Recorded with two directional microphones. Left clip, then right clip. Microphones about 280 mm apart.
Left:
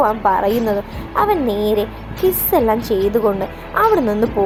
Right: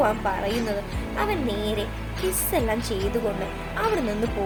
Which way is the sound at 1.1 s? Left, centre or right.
Centre.